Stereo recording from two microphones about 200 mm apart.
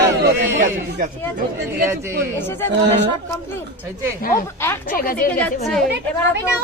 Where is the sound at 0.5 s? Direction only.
40° right (ahead or behind).